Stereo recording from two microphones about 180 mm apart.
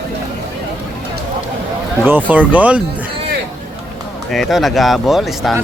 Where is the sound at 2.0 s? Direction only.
10° right (ahead or behind).